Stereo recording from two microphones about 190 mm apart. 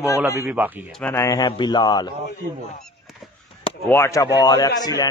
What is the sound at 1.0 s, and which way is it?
Speech, 15° left (ahead or behind).